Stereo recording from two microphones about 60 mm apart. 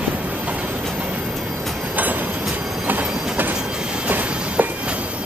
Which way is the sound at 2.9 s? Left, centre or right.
Right.